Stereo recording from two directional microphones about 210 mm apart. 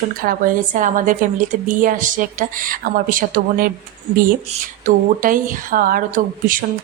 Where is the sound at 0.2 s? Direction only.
40° right (ahead or behind).